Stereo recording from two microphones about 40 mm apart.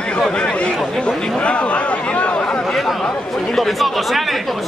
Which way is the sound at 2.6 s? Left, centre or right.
Centre.